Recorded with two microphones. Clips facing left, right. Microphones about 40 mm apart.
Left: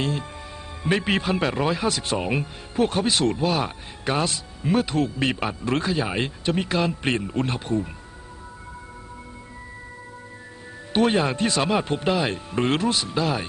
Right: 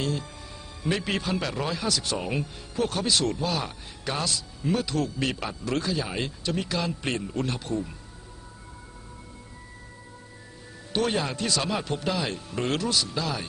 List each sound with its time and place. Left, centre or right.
0.0 s speech: left
10.9 s speech: left